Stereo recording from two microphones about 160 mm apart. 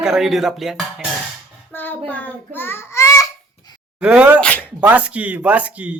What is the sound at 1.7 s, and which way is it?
Child singing, 10° left (ahead or behind).